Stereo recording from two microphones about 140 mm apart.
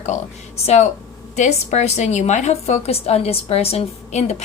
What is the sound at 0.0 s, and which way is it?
A woman's voice, 50° left (ahead or behind).